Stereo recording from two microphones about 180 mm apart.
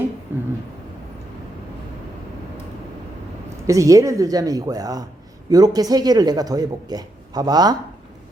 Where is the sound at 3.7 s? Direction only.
20° right (ahead or behind).